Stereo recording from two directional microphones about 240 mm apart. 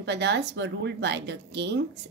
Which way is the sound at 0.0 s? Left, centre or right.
Right.